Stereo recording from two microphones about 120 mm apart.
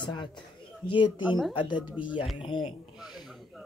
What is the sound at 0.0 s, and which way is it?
Speech, 40° left (ahead or behind).